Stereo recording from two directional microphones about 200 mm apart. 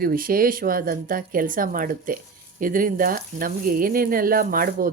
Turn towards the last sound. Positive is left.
turn(degrees=-45)  # may be behind; listen again after turning